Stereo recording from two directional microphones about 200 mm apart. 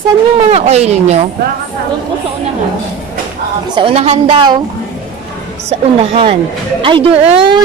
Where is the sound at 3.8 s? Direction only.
30° right (ahead or behind).